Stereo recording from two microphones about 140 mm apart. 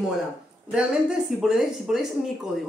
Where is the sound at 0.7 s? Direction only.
5° right (ahead or behind).